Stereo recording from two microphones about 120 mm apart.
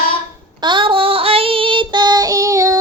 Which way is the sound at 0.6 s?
40° right (ahead or behind).